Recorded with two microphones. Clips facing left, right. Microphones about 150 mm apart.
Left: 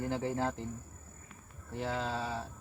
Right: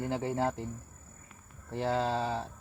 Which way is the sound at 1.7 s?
35° right (ahead or behind).